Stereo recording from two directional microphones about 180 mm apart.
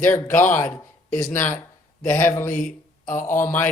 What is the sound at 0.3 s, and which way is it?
Speech, 45° left (ahead or behind).